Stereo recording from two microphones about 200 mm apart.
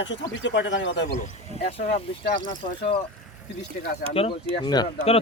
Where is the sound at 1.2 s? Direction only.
30° left (ahead or behind).